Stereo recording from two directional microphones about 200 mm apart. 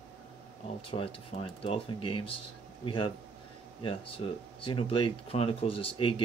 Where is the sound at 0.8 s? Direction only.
30° left (ahead or behind).